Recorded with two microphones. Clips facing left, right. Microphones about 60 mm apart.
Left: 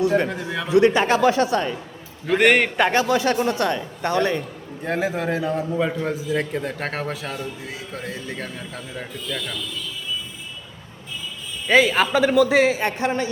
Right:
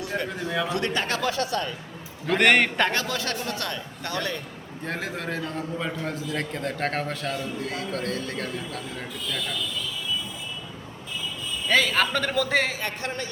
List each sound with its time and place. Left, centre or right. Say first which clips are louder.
0.7 s speech: left 10 dB; centre
2.2 s a man's voice: left 3 dB; centre
2.9 s speech: left 9 dB; centre
4.8 s a man's voice: left 8 dB; centre
11.7 s a man's voice: left 6 dB; centre
12.8 s speech: left 8 dB; centre